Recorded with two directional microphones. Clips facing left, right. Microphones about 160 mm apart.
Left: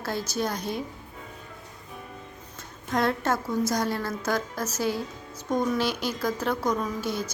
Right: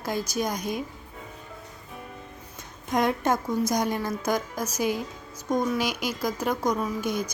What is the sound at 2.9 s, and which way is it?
Speech, 15° right (ahead or behind).